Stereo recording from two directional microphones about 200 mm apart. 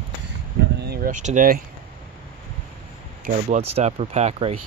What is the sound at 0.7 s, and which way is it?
Speech, 50° right (ahead or behind).